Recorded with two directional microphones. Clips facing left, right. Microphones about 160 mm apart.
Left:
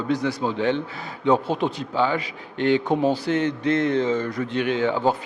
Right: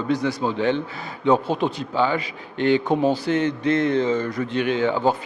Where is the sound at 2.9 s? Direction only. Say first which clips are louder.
Right 1 dB; 40° right (ahead or behind).